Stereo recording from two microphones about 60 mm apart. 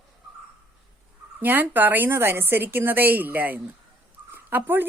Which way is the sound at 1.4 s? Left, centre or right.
Right.